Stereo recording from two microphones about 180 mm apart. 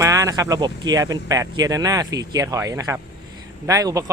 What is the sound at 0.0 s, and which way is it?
Speech, 20° right (ahead or behind).